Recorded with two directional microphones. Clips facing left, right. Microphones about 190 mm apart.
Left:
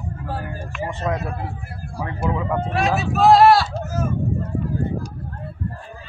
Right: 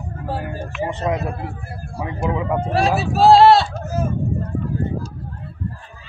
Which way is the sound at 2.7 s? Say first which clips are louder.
Right 4 dB; 35° right (ahead or behind).